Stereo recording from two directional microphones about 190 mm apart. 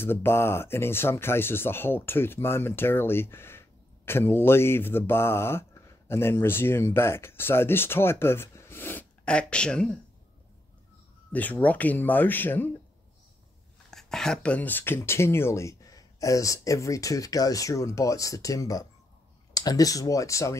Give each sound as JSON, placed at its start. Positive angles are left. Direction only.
{"t": 0.0, "sound": "speech", "side_deg": 10}
{"t": 11.3, "sound": "speech", "side_deg": 10}
{"t": 13.8, "sound": "speech", "side_deg": 0}